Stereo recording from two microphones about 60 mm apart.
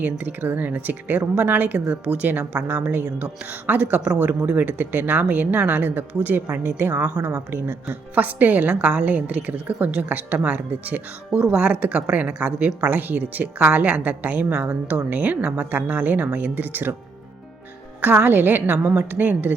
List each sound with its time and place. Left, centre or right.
0.0 s speech: right
7.5 s speech: right
8.1 s a woman's voice: right
18.2 s speech: right